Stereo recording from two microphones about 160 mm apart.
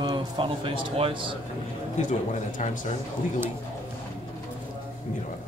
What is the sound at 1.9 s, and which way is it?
Speech, 50° left (ahead or behind).